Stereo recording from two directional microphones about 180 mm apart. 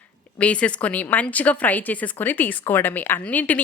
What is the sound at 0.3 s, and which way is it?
Speech, 5° left (ahead or behind).